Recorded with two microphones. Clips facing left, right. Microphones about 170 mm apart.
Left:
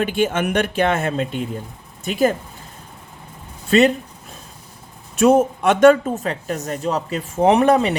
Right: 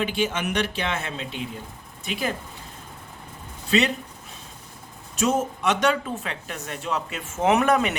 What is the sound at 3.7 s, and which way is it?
Speech, 50° left (ahead or behind).